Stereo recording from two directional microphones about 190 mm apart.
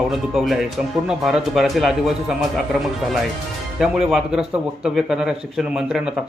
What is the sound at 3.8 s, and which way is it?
Speech, centre (ahead or behind).